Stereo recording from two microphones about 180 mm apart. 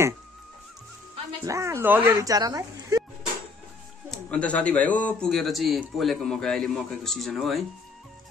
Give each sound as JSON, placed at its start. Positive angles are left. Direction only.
{"t": 1.4, "sound": "speech", "side_deg": -15}
{"t": 4.1, "sound": "speech", "side_deg": 5}